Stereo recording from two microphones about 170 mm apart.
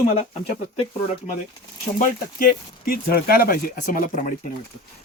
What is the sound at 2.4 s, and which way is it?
Speech, 60° left (ahead or behind).